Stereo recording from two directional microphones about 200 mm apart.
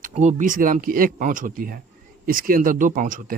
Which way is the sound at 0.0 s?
35° right (ahead or behind).